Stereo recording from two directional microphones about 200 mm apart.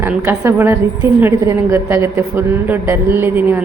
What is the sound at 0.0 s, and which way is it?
A woman's voice, 10° right (ahead or behind).